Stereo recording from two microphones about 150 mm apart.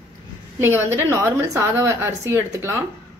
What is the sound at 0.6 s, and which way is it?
A woman's voice, 15° right (ahead or behind).